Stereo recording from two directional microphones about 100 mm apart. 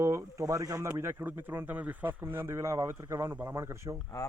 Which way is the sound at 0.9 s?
25° right (ahead or behind).